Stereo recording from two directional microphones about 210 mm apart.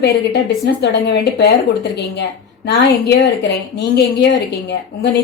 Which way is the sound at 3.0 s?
55° left (ahead or behind).